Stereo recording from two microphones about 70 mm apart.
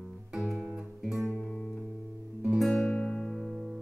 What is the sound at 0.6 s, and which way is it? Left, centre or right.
Music, centre.